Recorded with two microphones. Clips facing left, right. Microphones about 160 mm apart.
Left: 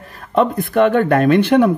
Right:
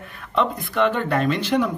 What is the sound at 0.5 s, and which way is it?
Speech, 55° left (ahead or behind).